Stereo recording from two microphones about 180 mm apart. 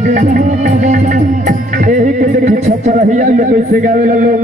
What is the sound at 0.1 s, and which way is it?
Music, 45° right (ahead or behind).